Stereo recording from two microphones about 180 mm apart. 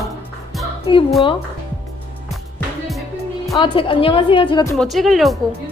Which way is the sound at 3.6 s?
30° left (ahead or behind).